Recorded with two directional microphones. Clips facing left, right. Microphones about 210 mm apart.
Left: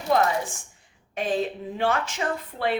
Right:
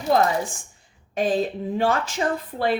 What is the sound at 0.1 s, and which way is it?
Speech, 35° right (ahead or behind).